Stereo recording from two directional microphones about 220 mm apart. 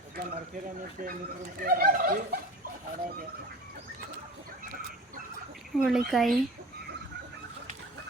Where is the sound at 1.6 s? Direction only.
40° right (ahead or behind).